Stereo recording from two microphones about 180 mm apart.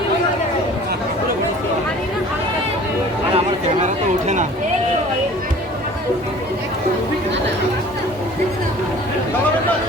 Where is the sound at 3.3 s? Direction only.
40° right (ahead or behind).